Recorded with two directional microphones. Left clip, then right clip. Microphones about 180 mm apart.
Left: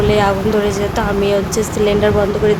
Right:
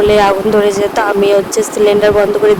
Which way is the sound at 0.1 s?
30° right (ahead or behind).